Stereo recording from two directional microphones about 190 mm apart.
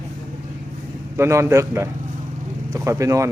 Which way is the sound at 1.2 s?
15° right (ahead or behind).